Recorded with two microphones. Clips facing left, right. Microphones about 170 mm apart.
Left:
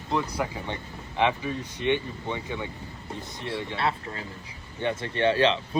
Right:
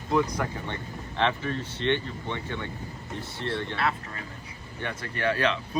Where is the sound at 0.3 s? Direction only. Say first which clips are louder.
Left 1 dB; 15° left (ahead or behind).